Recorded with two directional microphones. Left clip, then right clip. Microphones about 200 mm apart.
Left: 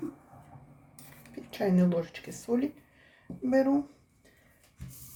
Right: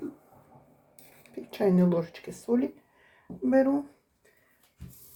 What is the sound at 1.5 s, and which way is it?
Speech, 15° right (ahead or behind).